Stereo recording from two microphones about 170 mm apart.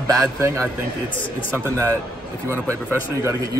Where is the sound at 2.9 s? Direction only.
15° right (ahead or behind).